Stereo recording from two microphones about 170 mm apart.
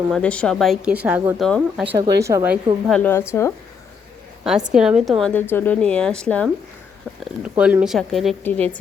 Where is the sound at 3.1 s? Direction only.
15° left (ahead or behind).